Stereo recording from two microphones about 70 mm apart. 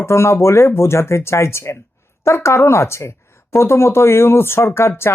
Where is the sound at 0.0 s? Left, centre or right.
Left.